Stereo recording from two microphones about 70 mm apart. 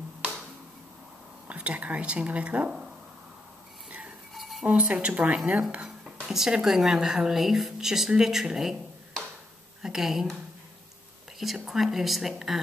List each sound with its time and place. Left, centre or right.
1.5 s speech: centre
4.3 s a sound: centre
4.6 s a woman's voice: centre